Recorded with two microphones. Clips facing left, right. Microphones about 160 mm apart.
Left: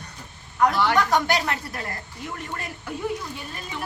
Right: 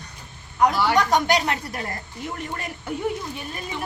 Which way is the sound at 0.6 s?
10° right (ahead or behind).